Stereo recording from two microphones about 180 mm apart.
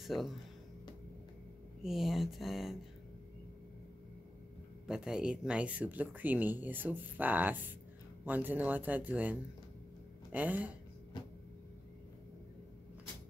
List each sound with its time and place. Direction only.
0.0 s speech: centre (ahead or behind)
1.8 s speech: centre (ahead or behind)
4.8 s speech: 5° right (ahead or behind)
11.1 s a sound: 25° left (ahead or behind)